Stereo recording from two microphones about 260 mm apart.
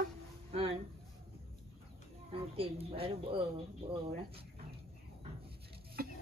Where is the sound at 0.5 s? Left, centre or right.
Right.